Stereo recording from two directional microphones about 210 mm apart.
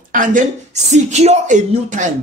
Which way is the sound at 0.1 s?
40° right (ahead or behind).